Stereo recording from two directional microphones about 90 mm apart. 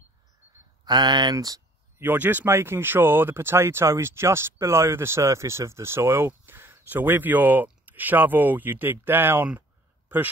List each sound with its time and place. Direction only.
0.8 s speech: 55° right (ahead or behind)
1.3 s speech: 45° right (ahead or behind)
2.0 s speech: 20° right (ahead or behind)